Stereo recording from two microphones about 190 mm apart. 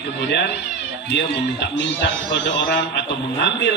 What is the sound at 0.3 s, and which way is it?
Speech, 65° left (ahead or behind).